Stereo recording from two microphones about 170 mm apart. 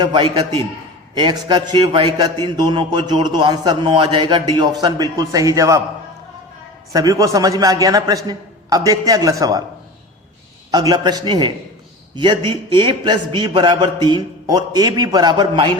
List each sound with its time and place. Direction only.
0.0 s a man's voice: 25° right (ahead or behind)
6.9 s a man's voice: 20° right (ahead or behind)
10.7 s a man's voice: 25° right (ahead or behind)